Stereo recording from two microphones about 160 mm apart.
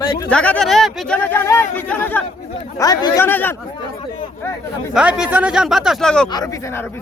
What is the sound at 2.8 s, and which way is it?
Speech, 25° left (ahead or behind).